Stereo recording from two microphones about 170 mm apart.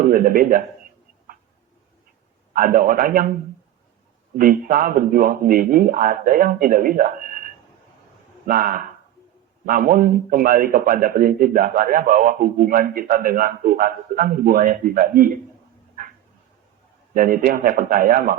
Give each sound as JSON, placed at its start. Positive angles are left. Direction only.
{"t": 0.0, "sound": "speech", "side_deg": -55}
{"t": 2.6, "sound": "a man's voice", "side_deg": -55}
{"t": 4.4, "sound": "a man's voice", "side_deg": -55}
{"t": 17.2, "sound": "a man's voice", "side_deg": -60}